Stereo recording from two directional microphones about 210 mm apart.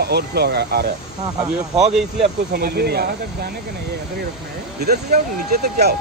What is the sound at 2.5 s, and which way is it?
Speech, 45° right (ahead or behind).